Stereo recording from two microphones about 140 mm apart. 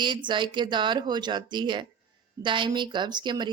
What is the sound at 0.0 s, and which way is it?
Speech, 35° right (ahead or behind).